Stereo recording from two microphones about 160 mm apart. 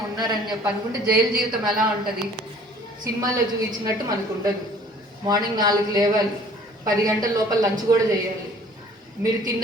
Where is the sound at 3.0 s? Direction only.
20° right (ahead or behind).